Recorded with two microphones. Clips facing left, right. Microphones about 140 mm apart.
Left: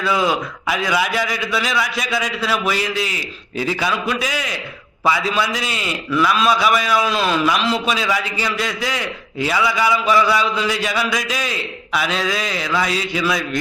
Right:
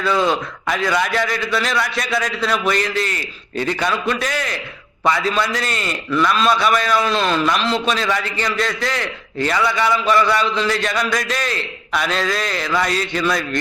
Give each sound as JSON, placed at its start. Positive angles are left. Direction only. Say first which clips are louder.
{"t": 0.0, "sound": "a man's voice", "louder": "right 1 dB", "side_deg": 5}